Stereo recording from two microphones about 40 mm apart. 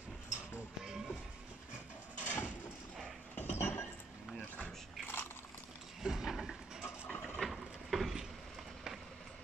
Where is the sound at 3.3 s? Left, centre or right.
Left.